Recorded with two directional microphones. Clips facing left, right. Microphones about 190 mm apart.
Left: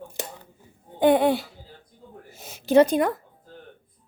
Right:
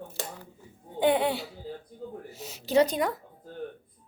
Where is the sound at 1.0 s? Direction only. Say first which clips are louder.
Left 6 dB; 45° left (ahead or behind).